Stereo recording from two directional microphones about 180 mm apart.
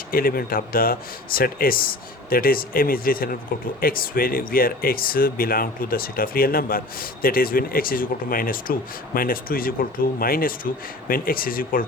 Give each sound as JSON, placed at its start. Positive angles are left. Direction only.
{"t": 0.1, "sound": "speech", "side_deg": 55}